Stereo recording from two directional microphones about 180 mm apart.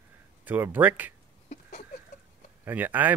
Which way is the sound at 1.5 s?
40° left (ahead or behind).